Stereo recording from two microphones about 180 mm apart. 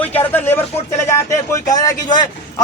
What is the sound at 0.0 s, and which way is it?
A man's voice, 10° left (ahead or behind).